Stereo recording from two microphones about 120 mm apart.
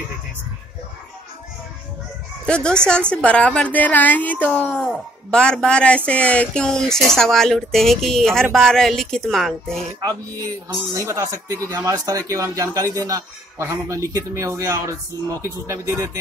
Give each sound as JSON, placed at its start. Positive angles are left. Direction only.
{"t": 2.4, "sound": "a woman's voice", "side_deg": 5}
{"t": 10.0, "sound": "speech", "side_deg": -30}